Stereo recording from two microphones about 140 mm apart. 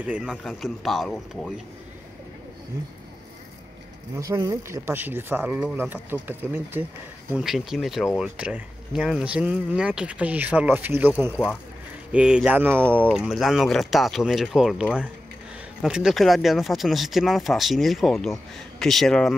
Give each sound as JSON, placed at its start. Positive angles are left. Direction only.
{"t": 0.0, "sound": "speech", "side_deg": -10}
{"t": 4.1, "sound": "speech", "side_deg": -25}
{"t": 7.3, "sound": "speech", "side_deg": 0}